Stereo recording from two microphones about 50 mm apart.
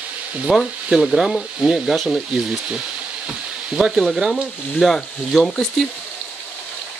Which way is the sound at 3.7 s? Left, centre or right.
Centre.